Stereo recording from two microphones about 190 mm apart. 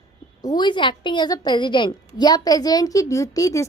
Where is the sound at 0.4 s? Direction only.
25° left (ahead or behind).